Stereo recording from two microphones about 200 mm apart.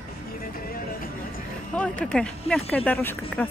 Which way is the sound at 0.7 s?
45° left (ahead or behind).